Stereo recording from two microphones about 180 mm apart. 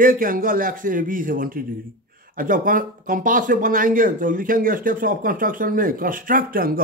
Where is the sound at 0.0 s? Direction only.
50° right (ahead or behind).